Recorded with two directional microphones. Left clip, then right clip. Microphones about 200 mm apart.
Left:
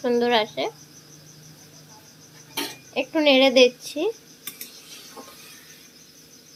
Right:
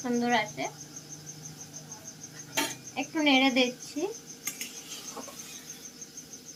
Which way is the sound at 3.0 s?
50° left (ahead or behind).